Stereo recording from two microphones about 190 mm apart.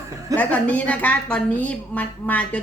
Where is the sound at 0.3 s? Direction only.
5° left (ahead or behind).